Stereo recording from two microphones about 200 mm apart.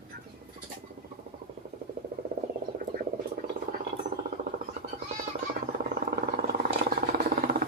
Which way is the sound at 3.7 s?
50° right (ahead or behind).